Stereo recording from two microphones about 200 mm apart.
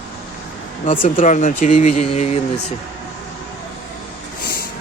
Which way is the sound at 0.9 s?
40° left (ahead or behind).